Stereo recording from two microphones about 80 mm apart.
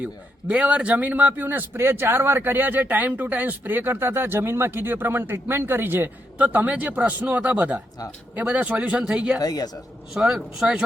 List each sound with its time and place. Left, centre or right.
0.0 s a man's voice: centre
9.4 s speech: left
10.2 s speech: centre